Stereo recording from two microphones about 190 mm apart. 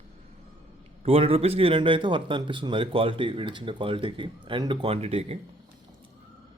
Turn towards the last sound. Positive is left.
turn(degrees=-30)  # may be behind; listen again after turning